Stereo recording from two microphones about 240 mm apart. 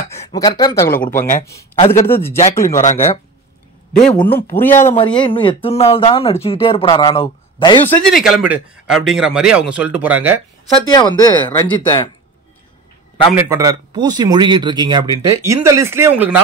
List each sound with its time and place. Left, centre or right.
0.1 s speech: centre
1.0 s speech: left
1.4 s speech: centre
2.8 s speech: left
3.9 s speech: centre
4.7 s speech: left
7.9 s a man's voice: centre
10.9 s speech: centre
13.3 s speech: centre